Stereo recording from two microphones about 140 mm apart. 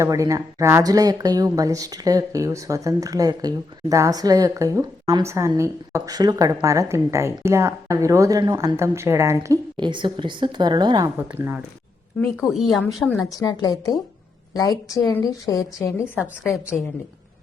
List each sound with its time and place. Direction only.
0.0 s speech: 25° right (ahead or behind)
9.7 s a woman's voice: 35° right (ahead or behind)
11.2 s speech: 15° right (ahead or behind)
12.2 s a woman's voice: centre (ahead or behind)
13.2 s a woman's voice: 25° left (ahead or behind)
16.1 s a woman's voice: 5° right (ahead or behind)